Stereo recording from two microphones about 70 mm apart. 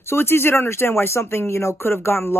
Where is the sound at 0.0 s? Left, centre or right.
Left.